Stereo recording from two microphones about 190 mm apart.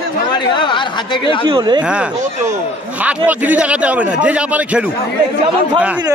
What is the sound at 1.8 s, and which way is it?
Speech, 5° right (ahead or behind).